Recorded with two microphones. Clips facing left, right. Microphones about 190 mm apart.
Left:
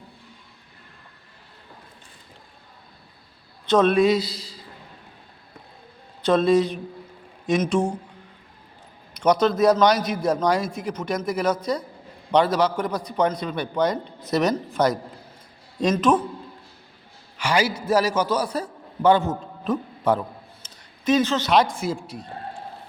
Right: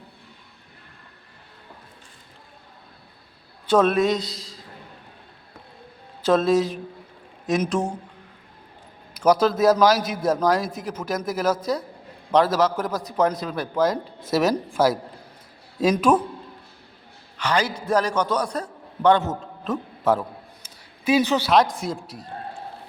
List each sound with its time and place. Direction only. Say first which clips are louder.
3.7 s a man's voice: left 1 dB; 5° right (ahead or behind)
6.2 s a man's voice: left 1 dB; centre (ahead or behind)
9.1 s a man's voice: right 1 dB; 5° right (ahead or behind)
17.3 s a man's voice: left 1 dB; 10° left (ahead or behind)
20.6 s a sound: right 1 dB; 10° right (ahead or behind)
21.5 s a man's voice: left 1 dB; centre (ahead or behind)